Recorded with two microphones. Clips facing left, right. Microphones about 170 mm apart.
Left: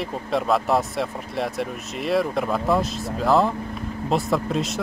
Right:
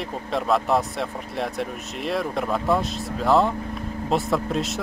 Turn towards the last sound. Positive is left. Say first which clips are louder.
# left 1 dB
turn(degrees=0)  # may be behind; listen again after turning